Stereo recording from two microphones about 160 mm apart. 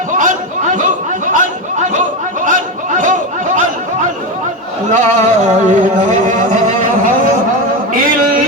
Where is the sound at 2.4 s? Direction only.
55° right (ahead or behind).